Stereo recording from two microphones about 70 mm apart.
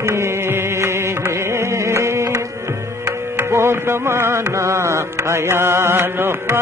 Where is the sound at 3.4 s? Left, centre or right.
Right.